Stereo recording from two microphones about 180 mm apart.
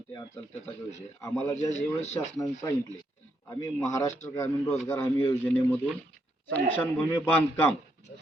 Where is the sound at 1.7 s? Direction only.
40° left (ahead or behind).